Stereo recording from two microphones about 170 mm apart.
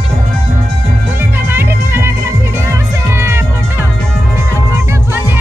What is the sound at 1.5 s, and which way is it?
Music, 15° right (ahead or behind).